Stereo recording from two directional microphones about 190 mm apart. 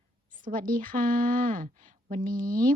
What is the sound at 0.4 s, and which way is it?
A woman's voice, 45° right (ahead or behind).